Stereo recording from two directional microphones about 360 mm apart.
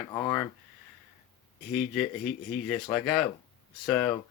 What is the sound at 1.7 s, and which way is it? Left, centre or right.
Speech, centre.